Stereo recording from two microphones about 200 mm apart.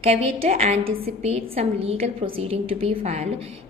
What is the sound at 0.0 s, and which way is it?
A woman's voice, 30° right (ahead or behind).